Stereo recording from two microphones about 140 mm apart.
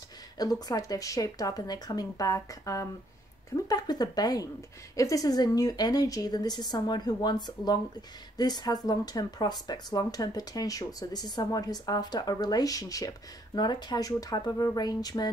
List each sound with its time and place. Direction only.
0.7 s a woman's voice: 25° left (ahead or behind)